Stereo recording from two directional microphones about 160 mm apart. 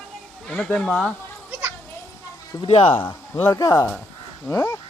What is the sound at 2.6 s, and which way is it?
Speech, 35° left (ahead or behind).